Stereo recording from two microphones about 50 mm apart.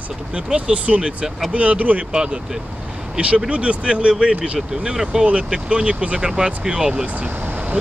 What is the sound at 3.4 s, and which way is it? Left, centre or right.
Speech, right.